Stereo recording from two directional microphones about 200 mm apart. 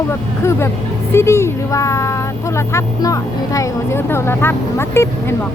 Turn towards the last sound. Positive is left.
turn(degrees=10)  # may be behind; listen again after turning